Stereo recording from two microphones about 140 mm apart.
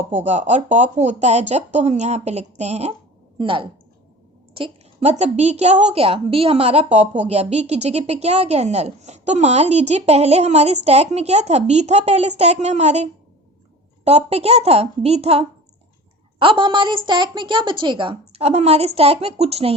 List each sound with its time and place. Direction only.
0.3 s a woman's voice: 55° right (ahead or behind)
3.3 s a woman's voice: 35° right (ahead or behind)